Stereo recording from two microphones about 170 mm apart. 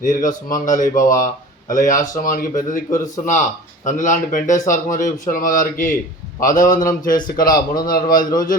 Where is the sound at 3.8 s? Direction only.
50° left (ahead or behind).